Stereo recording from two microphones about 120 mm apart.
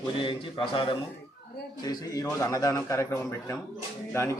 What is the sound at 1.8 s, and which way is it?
A man's voice, 30° left (ahead or behind).